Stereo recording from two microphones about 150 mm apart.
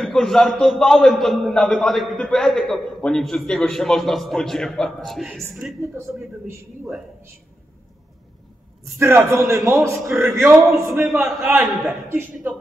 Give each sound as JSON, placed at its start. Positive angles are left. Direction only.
{"t": 0.0, "sound": "a man's voice", "side_deg": 5}
{"t": 5.8, "sound": "a man's voice", "side_deg": -15}
{"t": 8.9, "sound": "a man's voice", "side_deg": -20}
{"t": 11.2, "sound": "a man's voice", "side_deg": 0}
{"t": 12.1, "sound": "a man's voice", "side_deg": -15}